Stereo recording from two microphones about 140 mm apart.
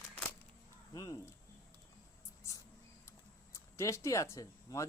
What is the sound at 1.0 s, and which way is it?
Speech, 25° left (ahead or behind).